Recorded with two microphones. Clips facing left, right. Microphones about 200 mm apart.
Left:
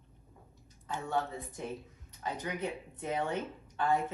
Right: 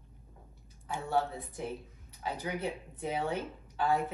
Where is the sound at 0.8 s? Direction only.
10° right (ahead or behind).